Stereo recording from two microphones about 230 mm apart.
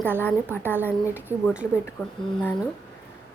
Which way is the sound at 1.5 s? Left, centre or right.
Centre.